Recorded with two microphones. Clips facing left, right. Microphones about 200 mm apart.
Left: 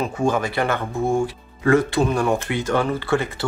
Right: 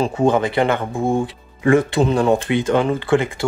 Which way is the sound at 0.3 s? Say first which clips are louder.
Right 4 dB; 20° right (ahead or behind).